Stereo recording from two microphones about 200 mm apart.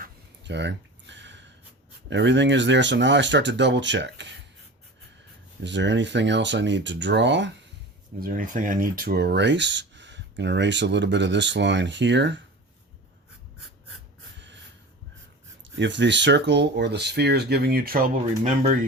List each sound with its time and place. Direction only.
0.0 s a sound: 60° right (ahead or behind)
2.0 s speech: 60° right (ahead or behind)
5.6 s speech: 60° right (ahead or behind)
8.2 s speech: 45° right (ahead or behind); by 12.4 s 60° right (ahead or behind)
15.8 s speech: 65° right (ahead or behind); by 18.7 s 40° right (ahead or behind)